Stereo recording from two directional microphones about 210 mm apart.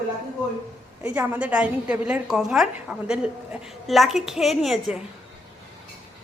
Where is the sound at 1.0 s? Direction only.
5° right (ahead or behind).